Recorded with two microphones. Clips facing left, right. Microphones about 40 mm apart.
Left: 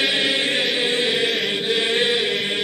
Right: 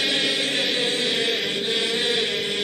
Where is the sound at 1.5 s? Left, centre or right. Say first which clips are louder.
Left 4 dB; centre.